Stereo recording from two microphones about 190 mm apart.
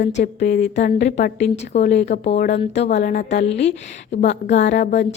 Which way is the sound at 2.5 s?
35° left (ahead or behind).